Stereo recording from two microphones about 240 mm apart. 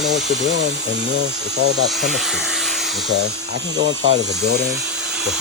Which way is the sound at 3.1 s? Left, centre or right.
Right.